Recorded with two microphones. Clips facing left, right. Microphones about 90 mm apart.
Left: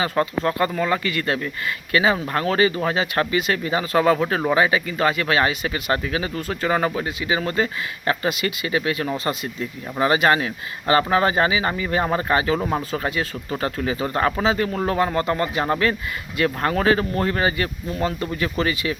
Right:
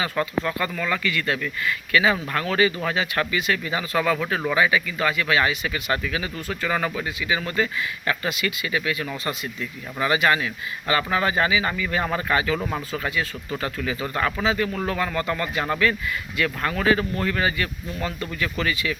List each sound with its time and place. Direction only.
0.0 s speech: 35° left (ahead or behind)